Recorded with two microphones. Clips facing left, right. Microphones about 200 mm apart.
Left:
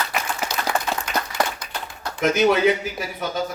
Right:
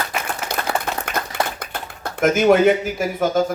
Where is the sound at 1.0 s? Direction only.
55° right (ahead or behind).